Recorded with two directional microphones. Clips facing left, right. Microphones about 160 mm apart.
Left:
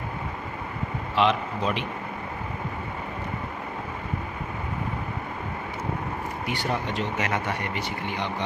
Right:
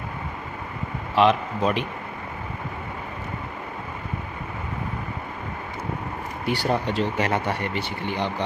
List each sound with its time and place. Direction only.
1.1 s a man's voice: 45° right (ahead or behind)
6.4 s speech: 35° right (ahead or behind)